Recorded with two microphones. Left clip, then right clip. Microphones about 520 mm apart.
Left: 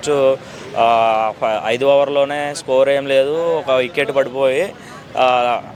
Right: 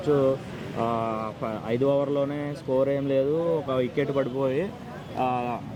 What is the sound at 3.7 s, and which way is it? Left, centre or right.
Speech, left.